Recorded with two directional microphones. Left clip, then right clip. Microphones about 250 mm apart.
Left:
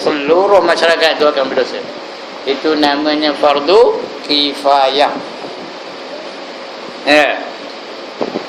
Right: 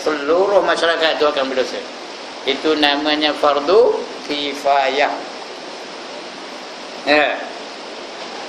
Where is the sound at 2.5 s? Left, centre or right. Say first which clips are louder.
Left 3 dB; centre.